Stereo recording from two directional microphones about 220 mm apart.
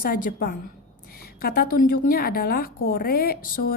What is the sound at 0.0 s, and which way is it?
A woman's voice, 40° left (ahead or behind).